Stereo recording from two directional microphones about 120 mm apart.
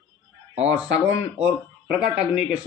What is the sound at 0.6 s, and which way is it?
Speech, 10° right (ahead or behind).